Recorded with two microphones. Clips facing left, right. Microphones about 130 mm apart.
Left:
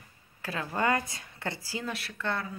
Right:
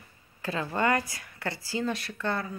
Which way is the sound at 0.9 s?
20° left (ahead or behind).